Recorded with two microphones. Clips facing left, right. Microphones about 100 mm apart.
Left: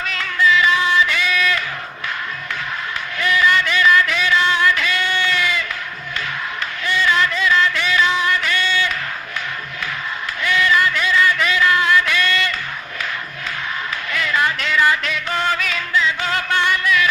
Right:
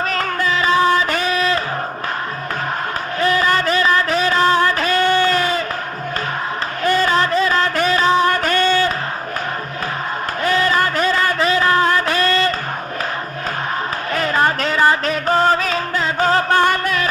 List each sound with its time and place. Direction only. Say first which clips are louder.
0.0 s music: even; 40° right (ahead or behind)
3.2 s a sound: right 1 dB; 40° right (ahead or behind)
6.8 s music: right 3 dB; 40° right (ahead or behind)
10.4 s music: right 1 dB; 40° right (ahead or behind)
14.1 s music: right 3 dB; 40° right (ahead or behind)